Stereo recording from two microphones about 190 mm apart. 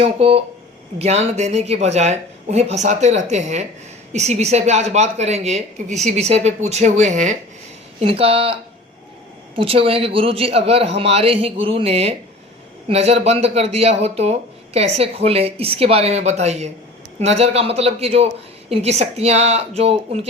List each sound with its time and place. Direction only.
0.0 s speech: 30° right (ahead or behind)
9.6 s speech: 30° right (ahead or behind)